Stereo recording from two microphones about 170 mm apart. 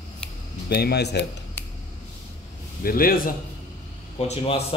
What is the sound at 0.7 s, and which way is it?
Speech, 70° left (ahead or behind).